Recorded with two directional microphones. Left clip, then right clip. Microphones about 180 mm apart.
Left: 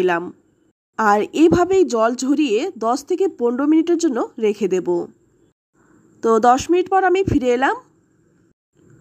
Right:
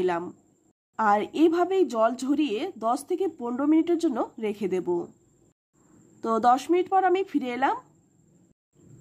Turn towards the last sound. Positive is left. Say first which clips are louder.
# left 9 dB
turn(degrees=30)  # may be behind; listen again after turning